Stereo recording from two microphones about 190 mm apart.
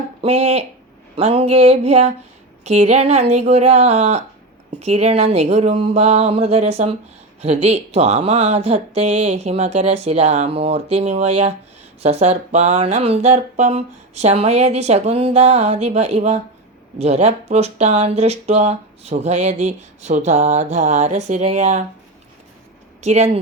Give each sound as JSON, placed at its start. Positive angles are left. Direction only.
{"t": 0.2, "sound": "speech", "side_deg": -35}
{"t": 23.0, "sound": "speech", "side_deg": -35}